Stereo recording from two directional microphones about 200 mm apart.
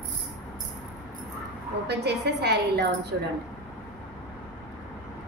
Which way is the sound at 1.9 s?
55° right (ahead or behind).